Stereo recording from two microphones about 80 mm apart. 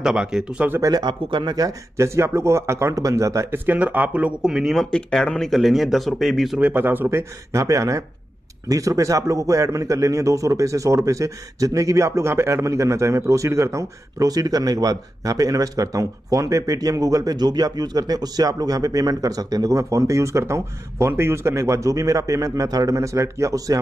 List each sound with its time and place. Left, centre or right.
0.0 s speech: centre
0.9 s speech: right
3.4 s speech: right; by 4.8 s centre
4.9 s speech: centre
6.6 s a man's voice: right